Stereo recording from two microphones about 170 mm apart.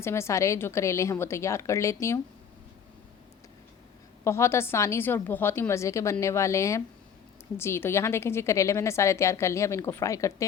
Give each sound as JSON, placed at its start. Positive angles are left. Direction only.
{"t": 0.0, "sound": "a woman's voice", "side_deg": 15}
{"t": 4.2, "sound": "a woman's voice", "side_deg": 15}